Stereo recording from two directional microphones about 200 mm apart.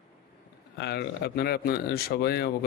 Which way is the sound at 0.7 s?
55° left (ahead or behind).